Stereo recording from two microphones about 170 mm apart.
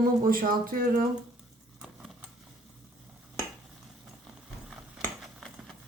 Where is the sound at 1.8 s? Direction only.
5° right (ahead or behind).